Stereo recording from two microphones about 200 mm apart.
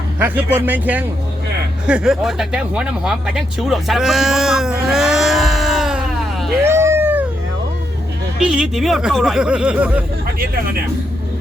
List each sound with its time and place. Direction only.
0.2 s speech: 10° right (ahead or behind)
8.4 s speech: centre (ahead or behind)